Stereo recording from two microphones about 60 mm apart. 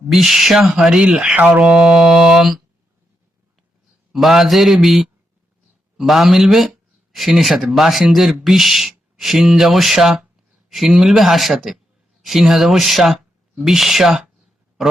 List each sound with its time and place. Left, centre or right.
0.1 s speech: centre
1.4 s speech: right
1.6 s speech: centre
4.1 s speech: centre